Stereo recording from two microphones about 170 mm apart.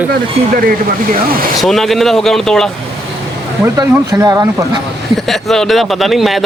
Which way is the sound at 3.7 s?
20° right (ahead or behind).